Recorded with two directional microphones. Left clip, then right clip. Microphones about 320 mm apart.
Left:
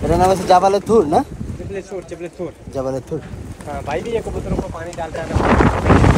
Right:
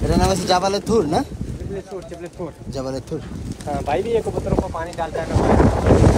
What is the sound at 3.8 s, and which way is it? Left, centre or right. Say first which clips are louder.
Speech: right 2 dB; right.